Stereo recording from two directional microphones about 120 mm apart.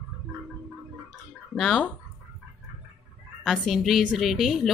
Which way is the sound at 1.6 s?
5° left (ahead or behind).